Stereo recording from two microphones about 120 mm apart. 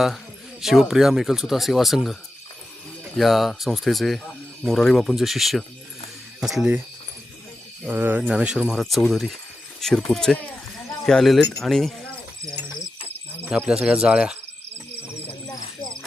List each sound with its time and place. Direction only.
0.6 s speech: 5° right (ahead or behind)
3.2 s speech: centre (ahead or behind)
7.9 s speech: 15° right (ahead or behind); by 11.9 s centre (ahead or behind)
13.4 s a sound: 15° right (ahead or behind)
13.7 s speech: 5° right (ahead or behind)